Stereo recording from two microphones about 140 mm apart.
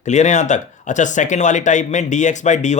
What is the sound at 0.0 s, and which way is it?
Speech, 55° left (ahead or behind).